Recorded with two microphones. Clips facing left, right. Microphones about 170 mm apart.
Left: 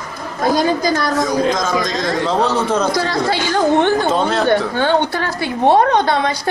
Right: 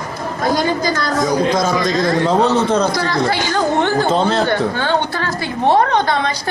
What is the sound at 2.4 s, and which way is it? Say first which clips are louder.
Speech: right 2 dB; 20° right (ahead or behind).